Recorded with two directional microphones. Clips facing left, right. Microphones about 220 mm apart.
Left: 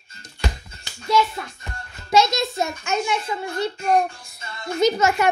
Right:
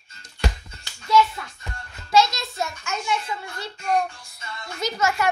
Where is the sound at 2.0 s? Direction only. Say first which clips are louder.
Left 2 dB; 20° left (ahead or behind).